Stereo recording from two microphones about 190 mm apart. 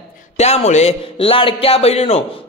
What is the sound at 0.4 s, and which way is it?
A man's voice, 35° left (ahead or behind).